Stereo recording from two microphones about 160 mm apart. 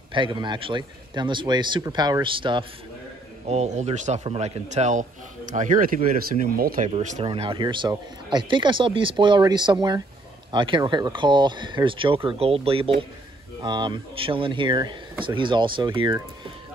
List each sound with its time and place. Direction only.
0.1 s speech: 30° right (ahead or behind)
3.4 s speech: 45° right (ahead or behind); by 6.9 s 65° right (ahead or behind)
6.9 s speech: 45° right (ahead or behind)
7.2 s speech: 30° right (ahead or behind)